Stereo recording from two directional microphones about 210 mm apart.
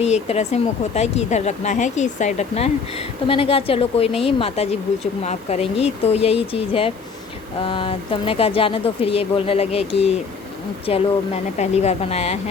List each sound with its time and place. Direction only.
0.0 s speech: 30° left (ahead or behind)